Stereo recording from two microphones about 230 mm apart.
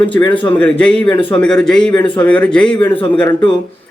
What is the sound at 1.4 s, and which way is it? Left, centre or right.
Speech, centre.